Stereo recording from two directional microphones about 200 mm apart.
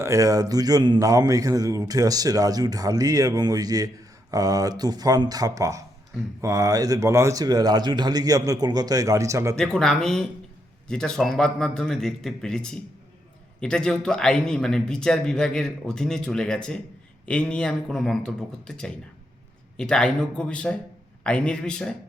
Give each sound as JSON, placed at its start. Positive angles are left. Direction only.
{"t": 0.0, "sound": "speech", "side_deg": -15}
{"t": 9.7, "sound": "a man's voice", "side_deg": 5}